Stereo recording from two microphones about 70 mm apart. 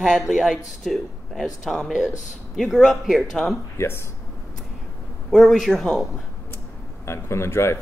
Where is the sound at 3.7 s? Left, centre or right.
Left.